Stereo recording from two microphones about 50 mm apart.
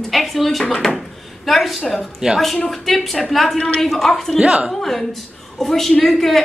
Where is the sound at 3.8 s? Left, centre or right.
Centre.